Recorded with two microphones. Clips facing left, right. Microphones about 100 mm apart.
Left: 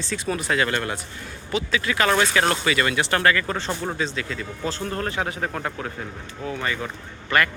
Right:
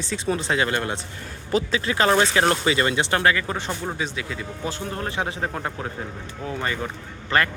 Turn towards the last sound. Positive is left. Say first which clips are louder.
# even
turn(degrees=-30)  # may be behind; listen again after turning